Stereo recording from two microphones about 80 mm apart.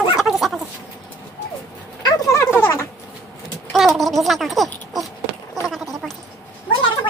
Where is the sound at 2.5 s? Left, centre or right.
Left.